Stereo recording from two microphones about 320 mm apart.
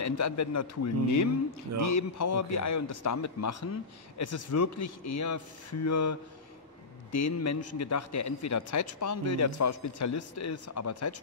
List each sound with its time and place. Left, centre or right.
0.0 s a man's voice: left